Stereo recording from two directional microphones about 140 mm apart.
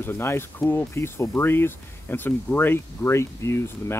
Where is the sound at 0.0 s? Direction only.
15° left (ahead or behind).